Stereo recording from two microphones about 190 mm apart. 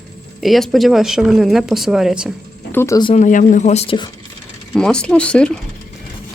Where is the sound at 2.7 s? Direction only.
15° left (ahead or behind).